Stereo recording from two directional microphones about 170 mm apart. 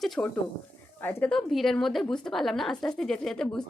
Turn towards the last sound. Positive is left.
turn(degrees=5)  # may be behind; listen again after turning